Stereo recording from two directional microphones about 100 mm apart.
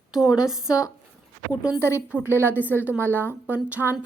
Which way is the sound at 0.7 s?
35° left (ahead or behind).